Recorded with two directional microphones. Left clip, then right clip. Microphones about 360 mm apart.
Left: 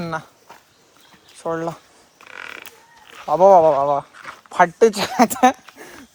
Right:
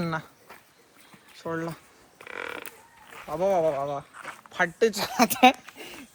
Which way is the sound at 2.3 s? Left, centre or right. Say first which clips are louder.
Left 1 dB; centre.